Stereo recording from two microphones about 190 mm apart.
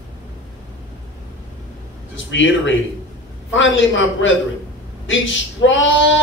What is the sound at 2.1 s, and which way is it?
Speech, 75° left (ahead or behind).